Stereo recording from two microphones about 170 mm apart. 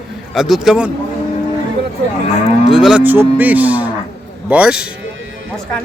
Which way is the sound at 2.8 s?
10° right (ahead or behind).